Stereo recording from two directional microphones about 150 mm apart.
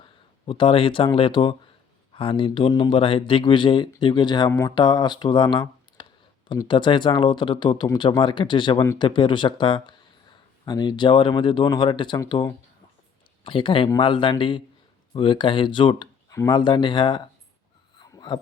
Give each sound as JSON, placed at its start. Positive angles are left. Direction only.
{"t": 0.4, "sound": "speech", "side_deg": 35}
{"t": 13.4, "sound": "speech", "side_deg": 35}
{"t": 18.0, "sound": "a sound", "side_deg": 25}